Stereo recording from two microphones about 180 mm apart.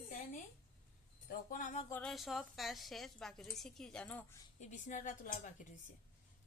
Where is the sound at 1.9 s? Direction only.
5° left (ahead or behind).